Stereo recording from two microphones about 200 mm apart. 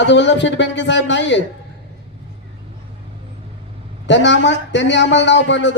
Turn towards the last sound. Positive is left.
turn(degrees=65)  # may be behind; listen again after turning